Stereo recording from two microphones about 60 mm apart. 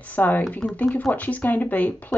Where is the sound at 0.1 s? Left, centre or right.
Left.